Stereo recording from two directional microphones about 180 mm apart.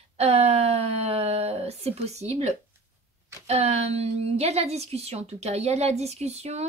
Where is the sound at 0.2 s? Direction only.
35° right (ahead or behind).